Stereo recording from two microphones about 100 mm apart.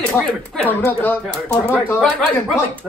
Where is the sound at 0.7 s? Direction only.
20° left (ahead or behind).